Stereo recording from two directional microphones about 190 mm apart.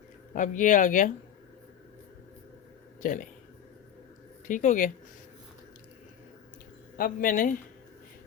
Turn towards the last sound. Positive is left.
turn(degrees=45)  # may be behind; listen again after turning